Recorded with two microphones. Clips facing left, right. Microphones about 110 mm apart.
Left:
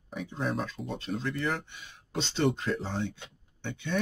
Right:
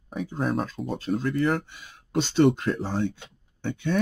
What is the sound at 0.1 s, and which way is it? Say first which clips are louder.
Speech: right 5 dB; 40° right (ahead or behind).